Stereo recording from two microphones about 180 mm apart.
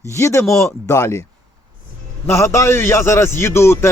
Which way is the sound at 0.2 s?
15° left (ahead or behind).